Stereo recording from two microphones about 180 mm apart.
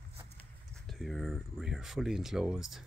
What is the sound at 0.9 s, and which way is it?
Speech, centre (ahead or behind).